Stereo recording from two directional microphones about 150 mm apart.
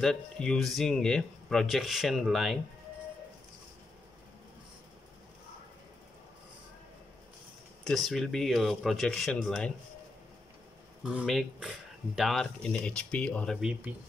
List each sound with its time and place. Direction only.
0.0 s speech: 5° left (ahead or behind)
7.8 s speech: centre (ahead or behind)
11.1 s speech: 5° right (ahead or behind)
13.6 s speech: 5° right (ahead or behind)